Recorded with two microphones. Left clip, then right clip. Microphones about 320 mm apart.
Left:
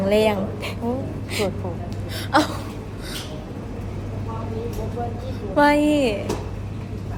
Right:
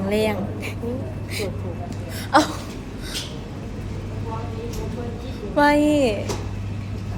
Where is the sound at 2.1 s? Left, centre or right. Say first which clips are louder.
Right 2 dB; centre.